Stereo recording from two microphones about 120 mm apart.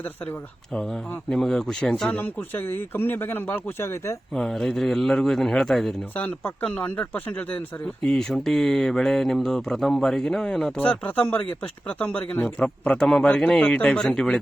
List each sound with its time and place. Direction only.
1.3 s speech: 5° left (ahead or behind); by 4.2 s 20° left (ahead or behind)
4.4 s speech: 5° left (ahead or behind)
6.1 s speech: 15° left (ahead or behind)